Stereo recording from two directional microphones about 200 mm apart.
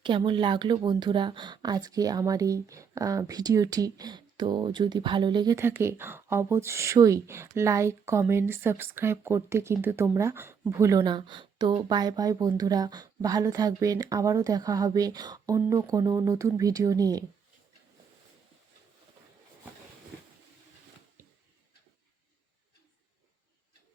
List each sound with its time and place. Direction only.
0.0 s speech: 25° right (ahead or behind)